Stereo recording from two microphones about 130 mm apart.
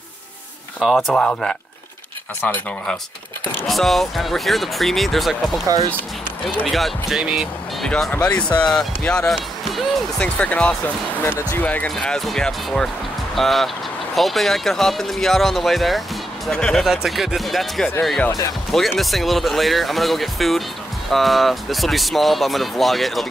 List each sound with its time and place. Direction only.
0.7 s speech: centre (ahead or behind)
7.9 s speech: 10° left (ahead or behind)